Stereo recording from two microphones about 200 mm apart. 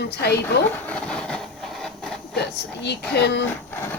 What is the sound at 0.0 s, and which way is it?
Speech, 55° left (ahead or behind).